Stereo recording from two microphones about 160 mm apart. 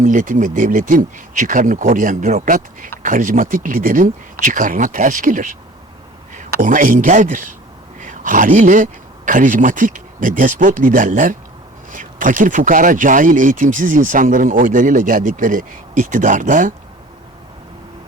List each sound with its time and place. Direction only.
0.0 s a man's voice: 55° right (ahead or behind)